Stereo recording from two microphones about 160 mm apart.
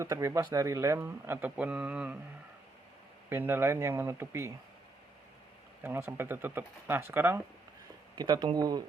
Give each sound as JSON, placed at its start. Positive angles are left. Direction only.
{"t": 0.0, "sound": "speech", "side_deg": -20}
{"t": 3.2, "sound": "speech", "side_deg": -15}
{"t": 5.8, "sound": "speech", "side_deg": -15}
{"t": 8.1, "sound": "speech", "side_deg": -25}